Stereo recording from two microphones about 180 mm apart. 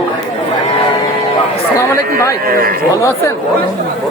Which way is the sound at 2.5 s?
55° right (ahead or behind).